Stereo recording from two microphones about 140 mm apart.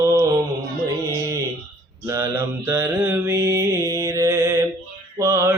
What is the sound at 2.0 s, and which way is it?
Mantra, 20° right (ahead or behind).